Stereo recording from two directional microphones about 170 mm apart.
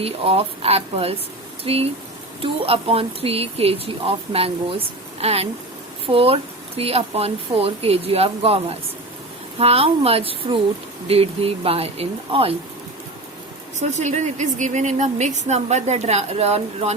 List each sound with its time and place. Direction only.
0.0 s speech: 35° right (ahead or behind)
13.7 s a woman's voice: 45° right (ahead or behind)